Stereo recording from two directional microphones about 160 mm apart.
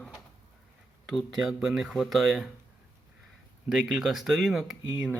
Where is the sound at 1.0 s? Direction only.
Centre (ahead or behind).